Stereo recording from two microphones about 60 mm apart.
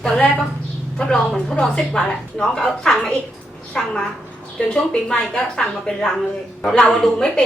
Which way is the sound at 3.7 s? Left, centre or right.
Left.